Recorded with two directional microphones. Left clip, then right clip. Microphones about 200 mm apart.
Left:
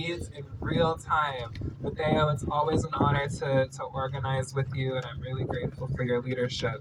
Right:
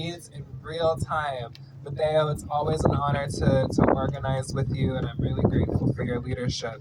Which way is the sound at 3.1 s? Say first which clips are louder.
Right 2 dB; 25° right (ahead or behind).